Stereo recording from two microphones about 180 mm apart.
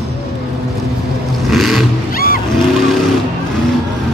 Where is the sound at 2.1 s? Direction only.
55° left (ahead or behind).